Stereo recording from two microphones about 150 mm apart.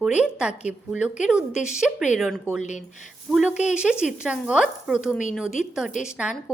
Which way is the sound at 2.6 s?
55° left (ahead or behind).